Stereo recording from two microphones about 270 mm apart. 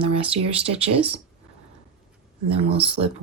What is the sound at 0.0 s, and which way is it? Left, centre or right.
Speech, right.